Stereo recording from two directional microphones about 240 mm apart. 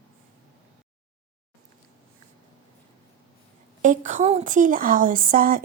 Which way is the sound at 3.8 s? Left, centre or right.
Right.